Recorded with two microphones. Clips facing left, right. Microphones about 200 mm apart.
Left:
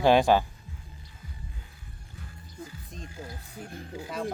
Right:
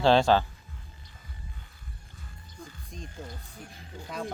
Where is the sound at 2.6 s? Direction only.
5° left (ahead or behind).